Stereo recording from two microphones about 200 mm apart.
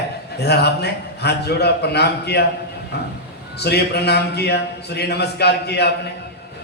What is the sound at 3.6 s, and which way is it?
A man's voice, 55° left (ahead or behind).